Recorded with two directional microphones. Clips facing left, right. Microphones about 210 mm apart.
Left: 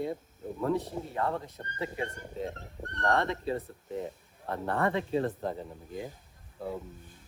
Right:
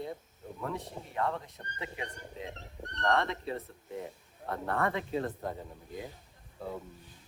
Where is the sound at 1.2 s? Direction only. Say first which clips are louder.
Even; 30° left (ahead or behind).